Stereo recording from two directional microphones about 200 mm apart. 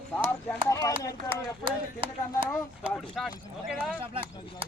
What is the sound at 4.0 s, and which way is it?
Speech, 25° right (ahead or behind).